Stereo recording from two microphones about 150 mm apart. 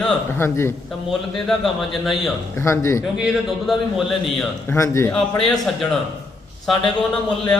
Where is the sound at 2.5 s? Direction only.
20° left (ahead or behind).